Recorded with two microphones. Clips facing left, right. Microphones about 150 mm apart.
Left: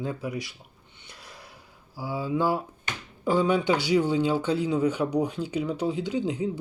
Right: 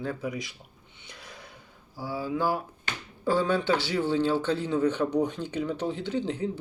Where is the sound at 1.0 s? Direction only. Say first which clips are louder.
Right 1 dB; 5° left (ahead or behind).